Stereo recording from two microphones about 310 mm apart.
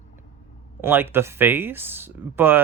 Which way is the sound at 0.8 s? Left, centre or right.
Centre.